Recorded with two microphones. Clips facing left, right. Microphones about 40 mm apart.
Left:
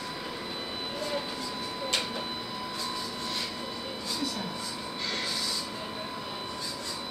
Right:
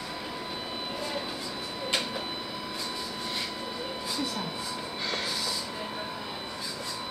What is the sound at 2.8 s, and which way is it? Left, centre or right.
Vehicle, centre.